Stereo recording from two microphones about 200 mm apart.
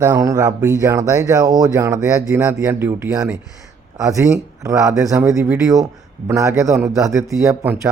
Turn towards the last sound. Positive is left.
turn(degrees=-5)  # may be behind; listen again after turning